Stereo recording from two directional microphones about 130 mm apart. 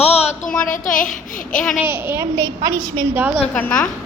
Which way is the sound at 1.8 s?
15° right (ahead or behind).